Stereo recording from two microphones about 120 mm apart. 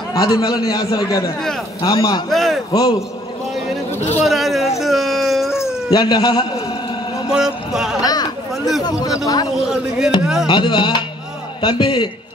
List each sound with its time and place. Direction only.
0.1 s a man's voice: 35° left (ahead or behind)
2.2 s mantra: centre (ahead or behind)
2.7 s a man's voice: 40° left (ahead or behind)
4.2 s a sound: centre (ahead or behind)
5.6 s speech: 35° left (ahead or behind)
7.2 s mantra: 5° right (ahead or behind)
8.0 s a sound: 30° left (ahead or behind)
8.8 s a man's voice: 30° left (ahead or behind)
9.7 s mantra: 5° right (ahead or behind)
10.4 s a man's voice: 40° left (ahead or behind)